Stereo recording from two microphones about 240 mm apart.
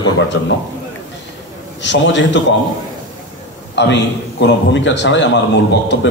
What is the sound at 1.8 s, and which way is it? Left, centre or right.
Speech, left.